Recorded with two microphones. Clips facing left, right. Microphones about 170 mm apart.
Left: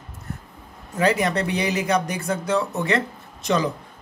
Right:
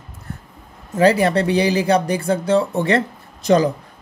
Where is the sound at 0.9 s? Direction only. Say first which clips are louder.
Right 6 dB; 35° right (ahead or behind).